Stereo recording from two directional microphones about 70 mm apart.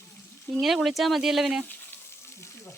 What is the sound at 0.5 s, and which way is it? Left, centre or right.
Speech, centre.